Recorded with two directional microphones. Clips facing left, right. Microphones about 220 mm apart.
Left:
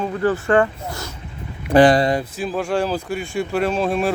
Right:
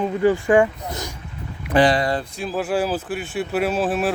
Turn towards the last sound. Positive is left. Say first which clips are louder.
# left 1 dB
turn(degrees=-5)  # may be behind; listen again after turning